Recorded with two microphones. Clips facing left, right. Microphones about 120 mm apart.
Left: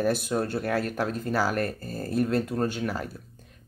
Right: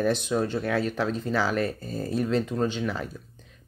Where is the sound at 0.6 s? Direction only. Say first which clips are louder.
Right 1 dB; 40° left (ahead or behind).